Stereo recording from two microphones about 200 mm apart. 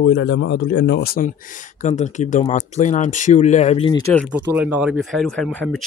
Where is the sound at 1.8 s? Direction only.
35° left (ahead or behind).